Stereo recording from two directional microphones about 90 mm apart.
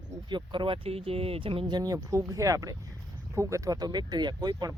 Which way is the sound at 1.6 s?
50° right (ahead or behind).